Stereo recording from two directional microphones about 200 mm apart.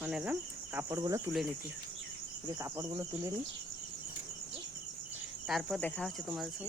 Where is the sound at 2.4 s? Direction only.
15° right (ahead or behind).